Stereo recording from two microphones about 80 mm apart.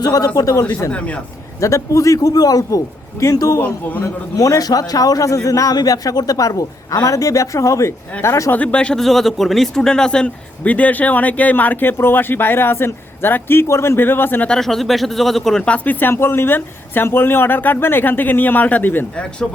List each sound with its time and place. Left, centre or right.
0.0 s a man's voice: left
0.9 s speech: centre
1.5 s a man's voice: left
3.6 s speech: left
4.0 s a man's voice: left
8.5 s speech: centre
14.4 s speech: centre; by 19.0 s left